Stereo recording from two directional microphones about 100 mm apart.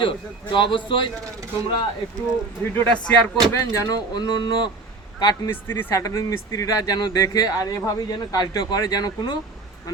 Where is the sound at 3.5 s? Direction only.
35° left (ahead or behind).